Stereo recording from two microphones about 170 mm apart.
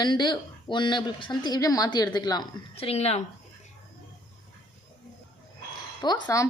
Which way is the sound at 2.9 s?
40° left (ahead or behind).